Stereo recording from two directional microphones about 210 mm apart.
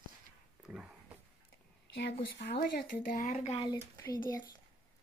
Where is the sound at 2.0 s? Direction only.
55° left (ahead or behind); by 3.7 s 30° left (ahead or behind).